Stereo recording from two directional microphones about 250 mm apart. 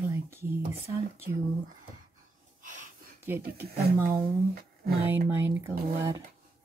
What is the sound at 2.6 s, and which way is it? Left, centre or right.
Gasp, right.